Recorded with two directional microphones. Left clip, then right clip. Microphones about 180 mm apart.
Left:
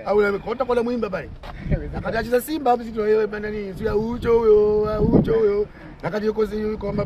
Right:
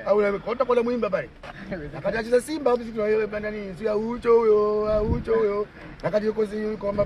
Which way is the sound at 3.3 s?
40° left (ahead or behind).